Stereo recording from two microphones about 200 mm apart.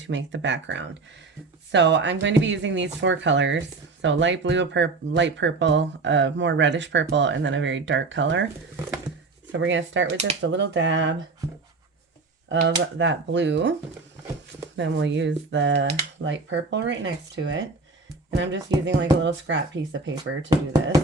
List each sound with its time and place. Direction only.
0.0 s speech: 65° right (ahead or behind)
8.7 s speech: 10° right (ahead or behind)
9.5 s speech: 70° right (ahead or behind)
12.5 s speech: 65° right (ahead or behind)
14.8 s speech: 65° right (ahead or behind)